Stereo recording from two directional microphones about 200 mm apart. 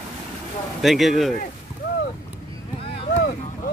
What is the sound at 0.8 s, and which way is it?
Speech, centre (ahead or behind).